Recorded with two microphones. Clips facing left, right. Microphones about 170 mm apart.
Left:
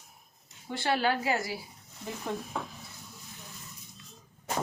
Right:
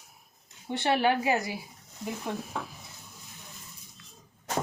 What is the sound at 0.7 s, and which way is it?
Speech, 20° right (ahead or behind).